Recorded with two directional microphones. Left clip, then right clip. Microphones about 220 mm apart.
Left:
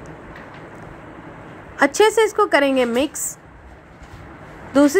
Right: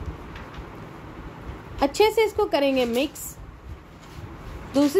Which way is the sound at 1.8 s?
15° left (ahead or behind).